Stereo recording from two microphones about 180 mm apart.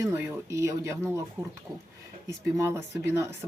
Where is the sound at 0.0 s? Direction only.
15° right (ahead or behind).